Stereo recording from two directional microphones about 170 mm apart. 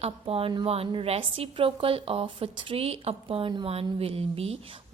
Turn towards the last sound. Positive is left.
turn(degrees=-35)  # may be behind; listen again after turning